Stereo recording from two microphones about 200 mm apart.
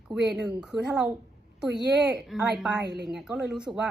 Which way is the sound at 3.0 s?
Centre (ahead or behind).